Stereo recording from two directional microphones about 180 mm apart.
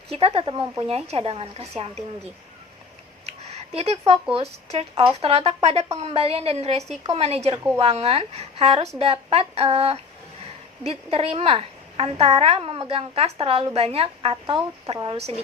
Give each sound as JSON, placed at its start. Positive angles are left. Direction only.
{"t": 0.1, "sound": "a woman's voice", "side_deg": -35}
{"t": 3.8, "sound": "a woman's voice", "side_deg": -35}